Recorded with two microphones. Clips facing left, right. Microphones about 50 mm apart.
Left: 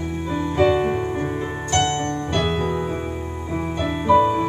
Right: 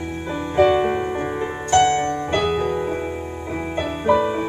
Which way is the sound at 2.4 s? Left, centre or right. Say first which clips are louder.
Right 2 dB; right.